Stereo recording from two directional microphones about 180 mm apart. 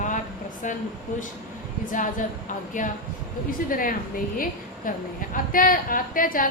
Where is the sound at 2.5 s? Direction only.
45° left (ahead or behind).